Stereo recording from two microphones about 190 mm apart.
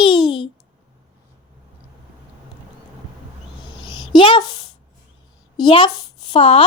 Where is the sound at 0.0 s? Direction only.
25° left (ahead or behind).